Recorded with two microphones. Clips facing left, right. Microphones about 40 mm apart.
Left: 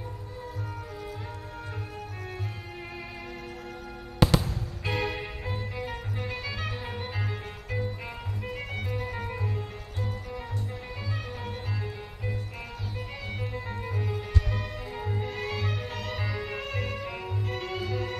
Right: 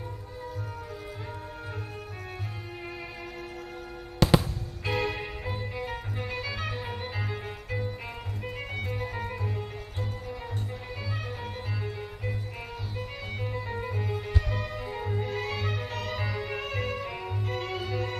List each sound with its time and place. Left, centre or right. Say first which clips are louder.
4.2 s music: right 1 dB; centre
9.3 s music: even; centre
13.6 s music: right 2 dB; centre
13.9 s music: even; right
14.5 s music: right 2 dB; centre